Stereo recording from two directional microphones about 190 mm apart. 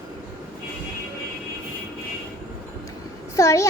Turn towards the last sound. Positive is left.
turn(degrees=15)  # may be behind; listen again after turning